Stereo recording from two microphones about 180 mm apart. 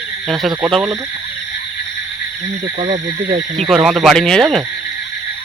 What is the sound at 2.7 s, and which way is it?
Speech, 35° right (ahead or behind).